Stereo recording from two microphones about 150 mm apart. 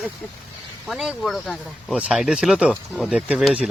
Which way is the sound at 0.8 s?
Centre (ahead or behind).